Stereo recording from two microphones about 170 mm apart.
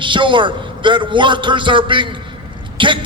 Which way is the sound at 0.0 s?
30° right (ahead or behind).